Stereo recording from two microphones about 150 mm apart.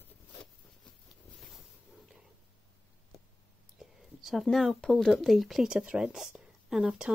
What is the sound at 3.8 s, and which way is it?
Speech, centre (ahead or behind).